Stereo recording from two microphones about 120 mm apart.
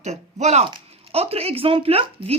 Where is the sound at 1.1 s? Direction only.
55° right (ahead or behind).